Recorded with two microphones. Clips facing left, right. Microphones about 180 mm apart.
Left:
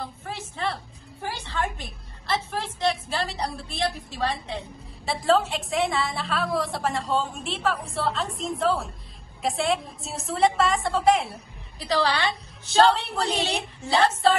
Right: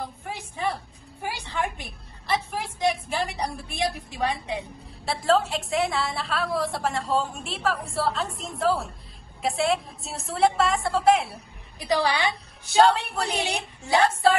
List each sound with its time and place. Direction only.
0.0 s a woman's voice: 15° right (ahead or behind)
5.0 s a woman's voice: centre (ahead or behind)
11.8 s a woman's voice: 15° right (ahead or behind)
13.8 s a woman's voice: centre (ahead or behind)